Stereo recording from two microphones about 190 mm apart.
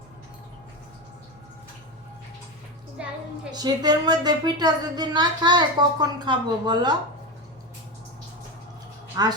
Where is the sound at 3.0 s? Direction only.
5° right (ahead or behind).